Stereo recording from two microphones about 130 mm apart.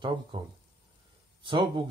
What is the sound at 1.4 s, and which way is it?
Speech, 40° right (ahead or behind).